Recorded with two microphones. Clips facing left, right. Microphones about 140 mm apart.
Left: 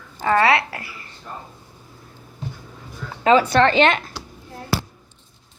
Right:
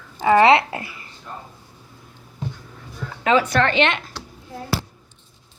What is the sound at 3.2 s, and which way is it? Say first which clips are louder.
Speech: left 3 dB; 35° left (ahead or behind).